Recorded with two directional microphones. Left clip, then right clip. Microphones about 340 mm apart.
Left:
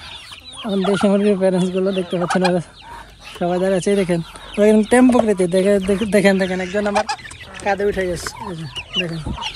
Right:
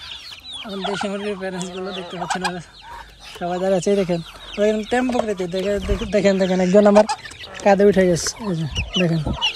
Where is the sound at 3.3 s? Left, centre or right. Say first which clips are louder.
Left 2 dB; centre; by 9.5 s right.